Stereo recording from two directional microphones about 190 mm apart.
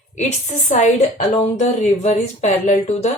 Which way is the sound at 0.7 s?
40° left (ahead or behind).